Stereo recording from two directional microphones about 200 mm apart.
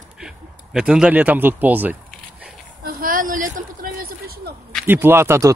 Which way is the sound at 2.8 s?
45° right (ahead or behind).